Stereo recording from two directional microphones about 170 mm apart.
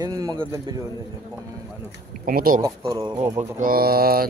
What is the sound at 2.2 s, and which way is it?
Speech, 55° right (ahead or behind).